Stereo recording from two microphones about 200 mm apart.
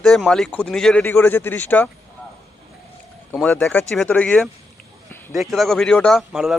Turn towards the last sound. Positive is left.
turn(degrees=0)  # may be behind; listen again after turning